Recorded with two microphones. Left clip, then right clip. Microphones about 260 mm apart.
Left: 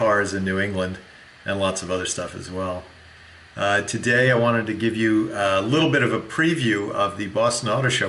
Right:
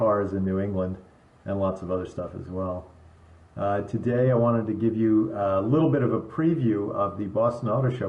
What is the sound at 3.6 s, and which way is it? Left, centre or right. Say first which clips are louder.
Speech: left 6 dB; centre.